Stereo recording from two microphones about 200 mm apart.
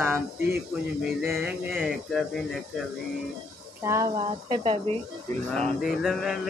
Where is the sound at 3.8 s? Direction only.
15° right (ahead or behind).